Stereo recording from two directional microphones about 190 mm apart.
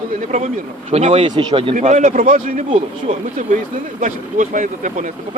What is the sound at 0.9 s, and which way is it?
Speech, 35° right (ahead or behind).